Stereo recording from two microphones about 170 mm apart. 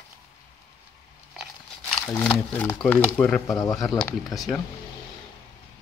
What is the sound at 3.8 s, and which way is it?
Speech, centre (ahead or behind).